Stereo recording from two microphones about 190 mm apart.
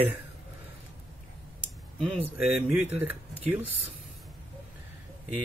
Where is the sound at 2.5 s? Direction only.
10° right (ahead or behind).